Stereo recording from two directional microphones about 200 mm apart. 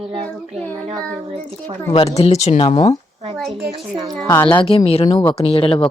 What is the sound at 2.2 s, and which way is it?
Speech, 35° left (ahead or behind).